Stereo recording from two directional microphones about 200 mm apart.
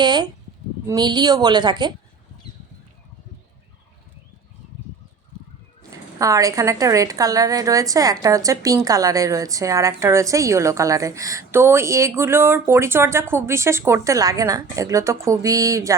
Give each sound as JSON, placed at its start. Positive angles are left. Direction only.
{"t": 0.0, "sound": "a woman's voice", "side_deg": -20}
{"t": 6.1, "sound": "a woman's voice", "side_deg": -15}